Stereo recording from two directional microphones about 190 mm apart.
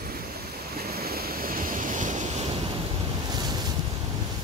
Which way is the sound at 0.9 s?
55° right (ahead or behind).